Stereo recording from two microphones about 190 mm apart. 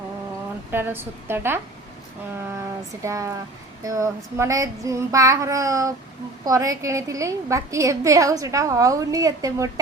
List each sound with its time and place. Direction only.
0.7 s a woman's voice: 10° right (ahead or behind)
3.0 s a woman's voice: 15° right (ahead or behind)